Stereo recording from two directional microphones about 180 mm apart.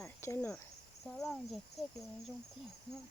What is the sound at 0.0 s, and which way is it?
Cricket, 15° left (ahead or behind).